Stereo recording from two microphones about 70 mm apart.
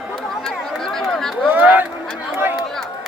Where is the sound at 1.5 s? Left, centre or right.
Right.